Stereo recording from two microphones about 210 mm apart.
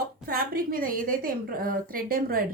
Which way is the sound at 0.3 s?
45° right (ahead or behind).